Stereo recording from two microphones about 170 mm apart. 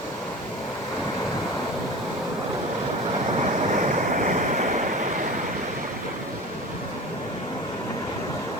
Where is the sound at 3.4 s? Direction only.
50° right (ahead or behind).